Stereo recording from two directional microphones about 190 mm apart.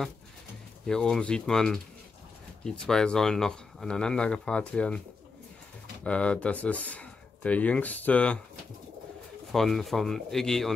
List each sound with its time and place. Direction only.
0.8 s speech: 5° left (ahead or behind)
6.0 s speech: 5° left (ahead or behind)
9.5 s speech: centre (ahead or behind)